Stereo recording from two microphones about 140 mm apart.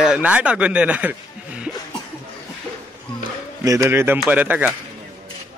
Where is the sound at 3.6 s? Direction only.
25° right (ahead or behind).